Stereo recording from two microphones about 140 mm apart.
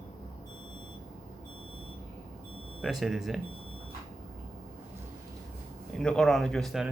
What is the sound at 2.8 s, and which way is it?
Speech, centre (ahead or behind).